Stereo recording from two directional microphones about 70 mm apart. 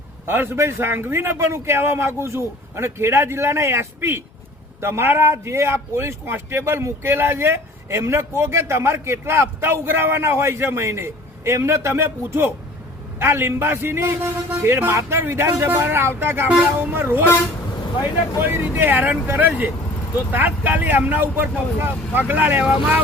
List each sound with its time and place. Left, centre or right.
0.3 s speech: right
18.4 s speech: right